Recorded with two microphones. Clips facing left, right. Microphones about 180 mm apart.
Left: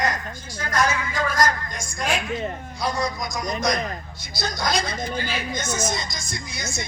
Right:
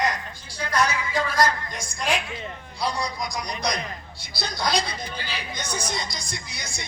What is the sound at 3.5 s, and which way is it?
A woman's voice, 45° left (ahead or behind).